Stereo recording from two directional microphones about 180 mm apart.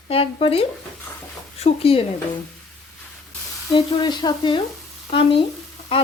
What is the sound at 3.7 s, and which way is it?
Frying, 25° left (ahead or behind).